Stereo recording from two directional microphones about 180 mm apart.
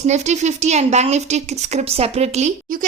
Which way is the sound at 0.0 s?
40° right (ahead or behind).